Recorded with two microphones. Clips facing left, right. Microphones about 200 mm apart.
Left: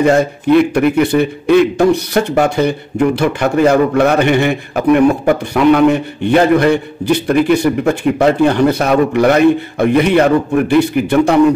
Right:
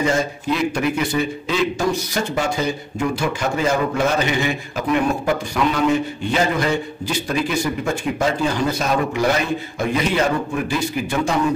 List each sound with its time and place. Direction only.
0.0 s a man's voice: 60° left (ahead or behind)